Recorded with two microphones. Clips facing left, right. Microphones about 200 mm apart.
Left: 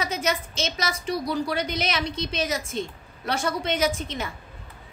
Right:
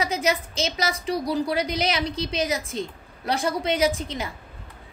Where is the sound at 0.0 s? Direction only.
30° right (ahead or behind).